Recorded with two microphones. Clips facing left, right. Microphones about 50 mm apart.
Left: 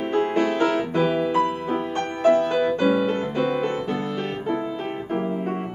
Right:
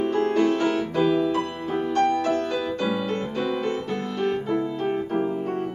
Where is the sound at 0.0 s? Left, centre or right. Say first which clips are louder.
Even; left.